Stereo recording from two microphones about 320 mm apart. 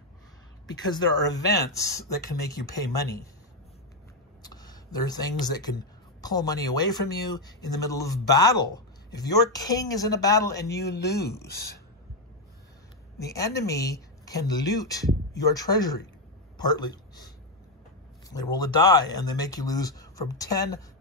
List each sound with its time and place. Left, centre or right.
0.8 s speech: centre
4.4 s a sound: centre
6.2 s speech: centre
10.8 s speech: left
13.2 s a man's voice: centre
18.3 s speech: centre